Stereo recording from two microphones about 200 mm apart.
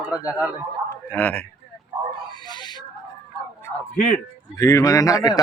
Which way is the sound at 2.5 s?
20° left (ahead or behind).